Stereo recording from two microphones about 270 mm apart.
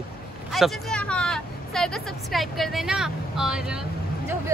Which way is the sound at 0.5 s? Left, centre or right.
Centre.